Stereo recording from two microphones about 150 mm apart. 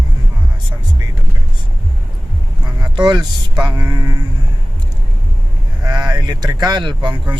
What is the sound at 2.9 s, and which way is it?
Speech, 30° right (ahead or behind).